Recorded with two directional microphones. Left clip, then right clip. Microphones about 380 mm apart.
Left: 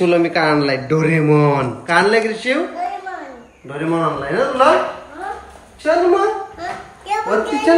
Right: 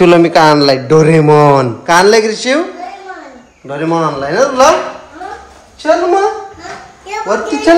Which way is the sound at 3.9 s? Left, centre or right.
Centre.